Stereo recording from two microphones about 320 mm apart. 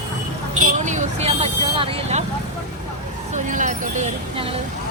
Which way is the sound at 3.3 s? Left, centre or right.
Right.